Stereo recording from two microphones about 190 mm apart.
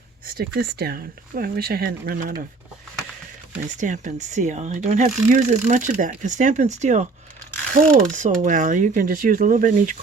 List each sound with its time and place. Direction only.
0.3 s speech: 55° right (ahead or behind)
3.8 s speech: 40° right (ahead or behind)